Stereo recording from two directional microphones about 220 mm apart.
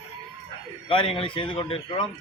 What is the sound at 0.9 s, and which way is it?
A man's voice, 25° left (ahead or behind).